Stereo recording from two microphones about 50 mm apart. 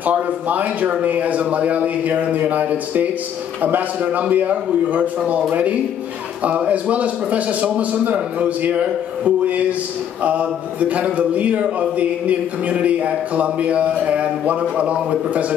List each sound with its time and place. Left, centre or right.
0.0 s a man's voice: right